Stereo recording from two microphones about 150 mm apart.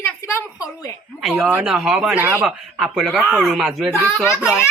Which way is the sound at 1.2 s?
10° right (ahead or behind).